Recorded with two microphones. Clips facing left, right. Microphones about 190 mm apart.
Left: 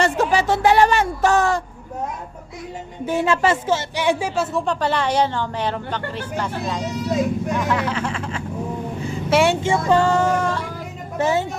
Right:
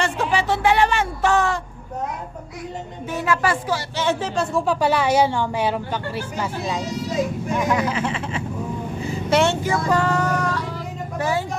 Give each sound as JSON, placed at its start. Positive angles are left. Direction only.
{"t": 0.0, "sound": "speech", "side_deg": 40}
{"t": 3.1, "sound": "a woman's voice", "side_deg": 25}
{"t": 4.6, "sound": "a woman's voice", "side_deg": -10}
{"t": 9.3, "sound": "speech", "side_deg": 5}
{"t": 9.6, "sound": "a woman's voice", "side_deg": 25}